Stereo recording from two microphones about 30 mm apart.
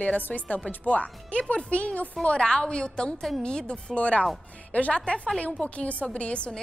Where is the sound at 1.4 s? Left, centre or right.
Left.